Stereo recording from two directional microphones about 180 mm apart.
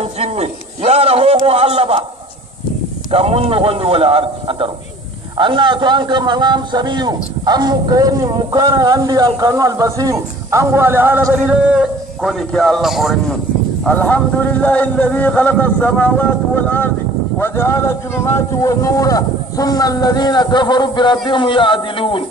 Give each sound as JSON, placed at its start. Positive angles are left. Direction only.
{"t": 0.0, "sound": "a man's voice", "side_deg": -35}
{"t": 3.1, "sound": "a man's voice", "side_deg": -30}
{"t": 13.8, "sound": "speech", "side_deg": 10}